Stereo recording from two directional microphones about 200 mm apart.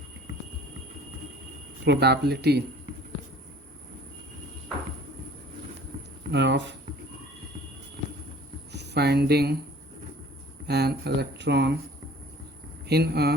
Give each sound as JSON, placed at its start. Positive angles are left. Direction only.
{"t": 1.8, "sound": "speech", "side_deg": -55}
{"t": 6.3, "sound": "speech", "side_deg": -60}
{"t": 8.7, "sound": "speech", "side_deg": -55}
{"t": 10.7, "sound": "speech", "side_deg": -55}
{"t": 12.8, "sound": "speech", "side_deg": -55}